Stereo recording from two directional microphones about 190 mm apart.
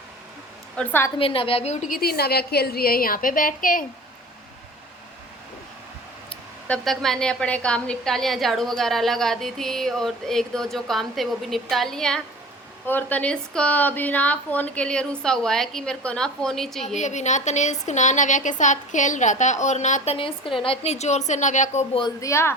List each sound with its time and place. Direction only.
0.8 s speech: 10° left (ahead or behind)
1.2 s a woman's voice: 30° left (ahead or behind); by 3.8 s 45° left (ahead or behind)
6.7 s a woman's voice: centre (ahead or behind)
16.8 s a woman's voice: 40° left (ahead or behind)
22.0 s speech: 15° left (ahead or behind)